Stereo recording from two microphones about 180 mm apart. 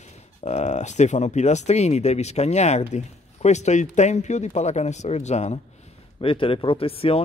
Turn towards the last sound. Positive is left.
turn(degrees=30)  # may be behind; listen again after turning